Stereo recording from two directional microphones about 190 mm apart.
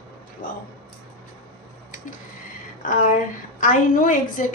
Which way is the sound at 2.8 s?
45° left (ahead or behind).